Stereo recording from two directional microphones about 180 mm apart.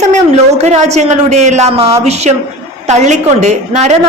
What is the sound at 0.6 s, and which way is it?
A woman's voice, 40° right (ahead or behind).